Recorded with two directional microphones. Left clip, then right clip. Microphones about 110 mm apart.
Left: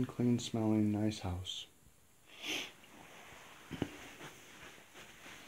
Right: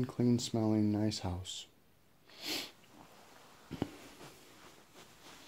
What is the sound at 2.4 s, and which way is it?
Sniff, 60° right (ahead or behind).